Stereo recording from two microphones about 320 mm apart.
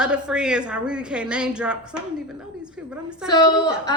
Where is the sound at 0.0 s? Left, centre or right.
Centre.